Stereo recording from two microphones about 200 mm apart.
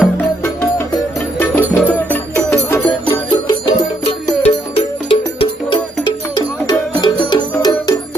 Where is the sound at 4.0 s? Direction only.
30° left (ahead or behind).